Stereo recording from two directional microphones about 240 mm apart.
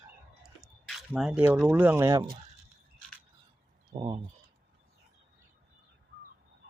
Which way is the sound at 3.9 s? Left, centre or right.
Centre.